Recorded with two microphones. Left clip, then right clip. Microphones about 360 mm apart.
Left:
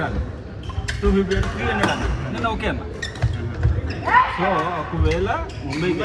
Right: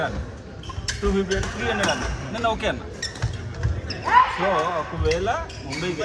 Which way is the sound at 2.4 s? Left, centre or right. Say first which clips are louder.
Right 1 dB; centre.